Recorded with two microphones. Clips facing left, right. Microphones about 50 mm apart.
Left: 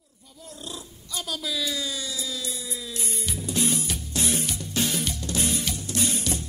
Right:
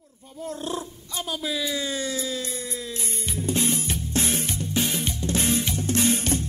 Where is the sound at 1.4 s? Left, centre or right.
Right.